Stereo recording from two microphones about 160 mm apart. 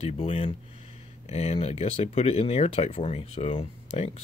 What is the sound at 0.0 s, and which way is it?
Speech, 35° left (ahead or behind).